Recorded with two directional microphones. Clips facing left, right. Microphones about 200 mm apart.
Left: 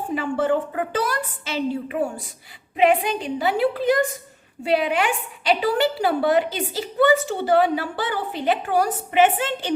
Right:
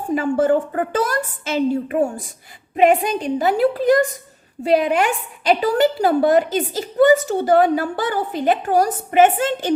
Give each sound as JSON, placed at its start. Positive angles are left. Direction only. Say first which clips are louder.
{"t": 0.1, "sound": "a woman's voice", "louder": "right 5 dB", "side_deg": -45}